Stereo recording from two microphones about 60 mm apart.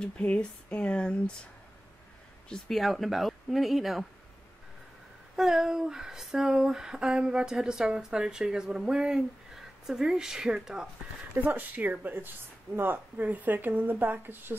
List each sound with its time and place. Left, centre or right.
0.0 s speech: left
2.5 s speech: centre
5.3 s a sound: centre
11.3 s speech: right